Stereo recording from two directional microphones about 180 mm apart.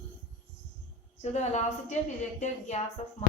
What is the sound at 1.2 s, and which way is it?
A woman's voice, 40° left (ahead or behind).